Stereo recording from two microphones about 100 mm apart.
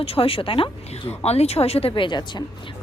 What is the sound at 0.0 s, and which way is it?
A woman's voice, 70° left (ahead or behind).